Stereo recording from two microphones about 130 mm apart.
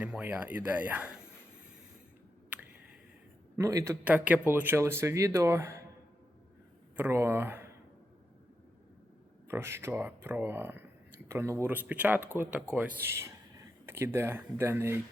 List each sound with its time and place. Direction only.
0.0 s speech: 10° right (ahead or behind)
3.6 s speech: 25° right (ahead or behind)
4.0 s speech: 10° right (ahead or behind)
6.9 s speech: 20° right (ahead or behind)
9.5 s speech: 20° right (ahead or behind)